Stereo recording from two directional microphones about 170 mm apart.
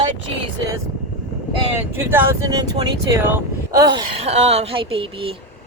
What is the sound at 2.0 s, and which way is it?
Speech, 15° right (ahead or behind).